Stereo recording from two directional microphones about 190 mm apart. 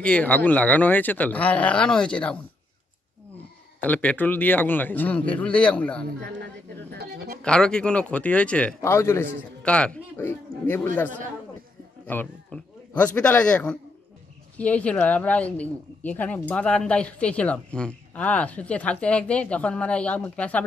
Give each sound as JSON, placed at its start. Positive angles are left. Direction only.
{"t": 0.0, "sound": "speech", "side_deg": 5}
{"t": 3.8, "sound": "speech", "side_deg": 10}
{"t": 6.9, "sound": "speech", "side_deg": -55}
{"t": 7.4, "sound": "speech", "side_deg": 5}
{"t": 12.1, "sound": "a man's voice", "side_deg": 5}